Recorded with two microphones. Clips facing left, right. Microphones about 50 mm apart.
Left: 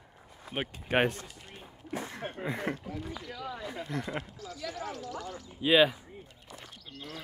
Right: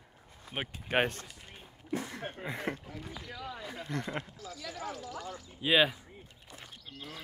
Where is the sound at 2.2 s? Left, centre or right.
Centre.